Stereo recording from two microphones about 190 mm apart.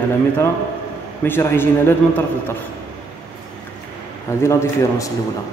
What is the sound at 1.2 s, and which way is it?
A man's voice, 10° left (ahead or behind).